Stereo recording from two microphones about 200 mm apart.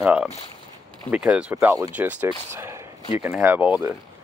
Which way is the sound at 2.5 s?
15° right (ahead or behind).